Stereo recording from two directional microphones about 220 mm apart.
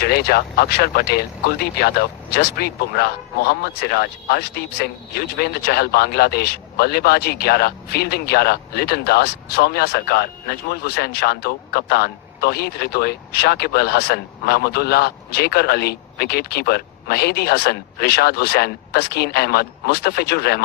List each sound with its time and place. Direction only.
0.0 s speech: 45° left (ahead or behind)